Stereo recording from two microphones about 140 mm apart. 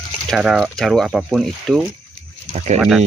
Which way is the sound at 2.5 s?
55° right (ahead or behind).